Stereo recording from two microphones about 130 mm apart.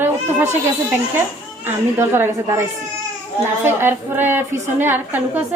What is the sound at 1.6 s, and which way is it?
A woman's voice, 20° right (ahead or behind).